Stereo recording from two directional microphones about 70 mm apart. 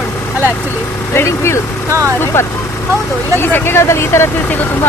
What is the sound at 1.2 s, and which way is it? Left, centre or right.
Speech, left.